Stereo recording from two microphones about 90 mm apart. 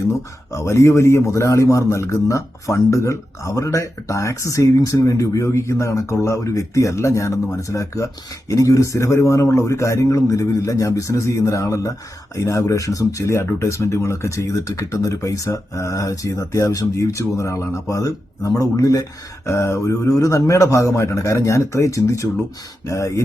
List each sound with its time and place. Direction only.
0.1 s speech: 35° left (ahead or behind)